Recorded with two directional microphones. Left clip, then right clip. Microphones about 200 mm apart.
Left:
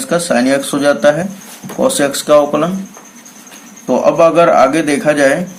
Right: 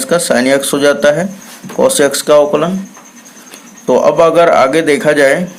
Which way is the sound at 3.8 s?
40° right (ahead or behind).